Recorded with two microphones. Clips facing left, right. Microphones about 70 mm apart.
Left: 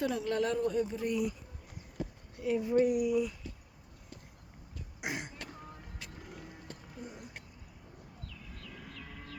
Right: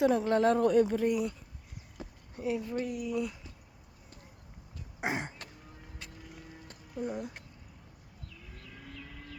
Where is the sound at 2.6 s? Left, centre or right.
Centre.